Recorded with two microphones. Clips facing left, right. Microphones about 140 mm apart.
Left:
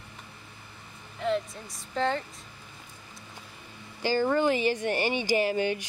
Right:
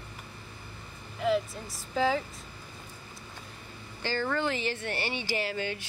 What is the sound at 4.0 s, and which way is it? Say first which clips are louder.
Speech: left 6 dB; 15° left (ahead or behind).